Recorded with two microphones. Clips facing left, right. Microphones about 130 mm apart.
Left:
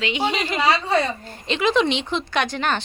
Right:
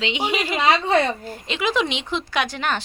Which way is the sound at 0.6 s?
20° right (ahead or behind).